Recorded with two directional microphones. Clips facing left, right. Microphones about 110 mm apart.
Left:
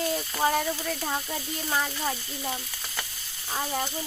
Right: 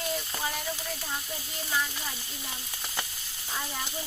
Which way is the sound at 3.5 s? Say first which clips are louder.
Left 6 dB; 45° left (ahead or behind).